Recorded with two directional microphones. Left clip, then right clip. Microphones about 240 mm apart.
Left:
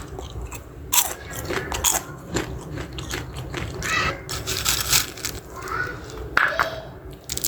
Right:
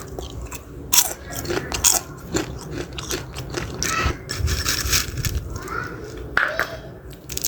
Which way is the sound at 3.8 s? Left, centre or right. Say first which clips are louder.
Even; centre.